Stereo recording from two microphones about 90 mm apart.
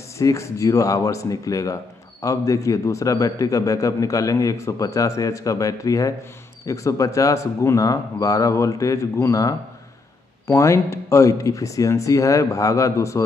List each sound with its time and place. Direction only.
0.2 s a man's voice: 35° left (ahead or behind)